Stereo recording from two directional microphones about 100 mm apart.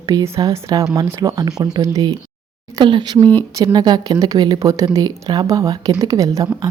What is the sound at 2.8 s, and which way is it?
Speech, 50° right (ahead or behind).